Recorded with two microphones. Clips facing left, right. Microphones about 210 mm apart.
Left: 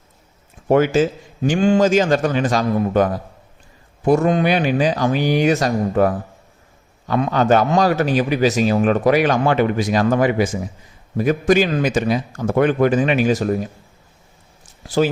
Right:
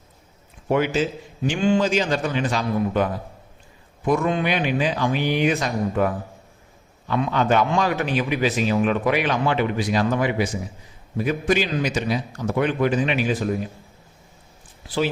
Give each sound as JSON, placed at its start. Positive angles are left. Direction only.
{"t": 0.9, "sound": "a man's voice", "side_deg": 45}